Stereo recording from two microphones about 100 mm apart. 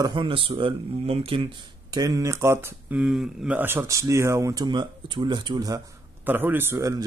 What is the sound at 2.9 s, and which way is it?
Speech, 5° right (ahead or behind).